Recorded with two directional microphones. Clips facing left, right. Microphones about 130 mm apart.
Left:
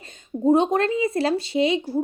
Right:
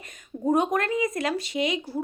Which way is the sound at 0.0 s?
25° left (ahead or behind).